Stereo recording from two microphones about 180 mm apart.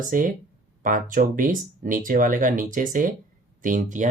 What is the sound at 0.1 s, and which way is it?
Speech, 50° right (ahead or behind).